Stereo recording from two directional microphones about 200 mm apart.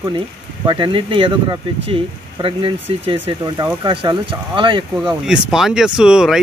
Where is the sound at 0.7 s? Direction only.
25° right (ahead or behind).